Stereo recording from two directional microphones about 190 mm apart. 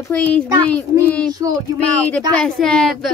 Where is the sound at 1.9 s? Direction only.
5° left (ahead or behind).